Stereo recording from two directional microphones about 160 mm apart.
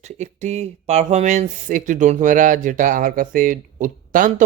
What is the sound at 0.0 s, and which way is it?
Speech, 45° right (ahead or behind).